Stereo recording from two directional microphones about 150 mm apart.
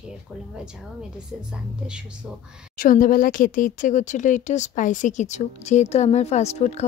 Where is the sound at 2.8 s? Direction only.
60° left (ahead or behind).